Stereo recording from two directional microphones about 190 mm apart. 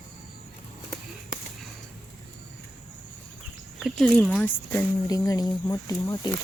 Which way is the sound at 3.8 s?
Centre (ahead or behind).